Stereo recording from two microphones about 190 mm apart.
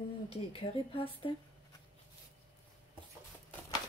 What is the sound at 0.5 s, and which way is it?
Speech, 30° left (ahead or behind).